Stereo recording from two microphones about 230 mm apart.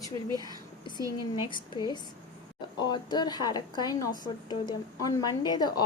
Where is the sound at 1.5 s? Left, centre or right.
Centre.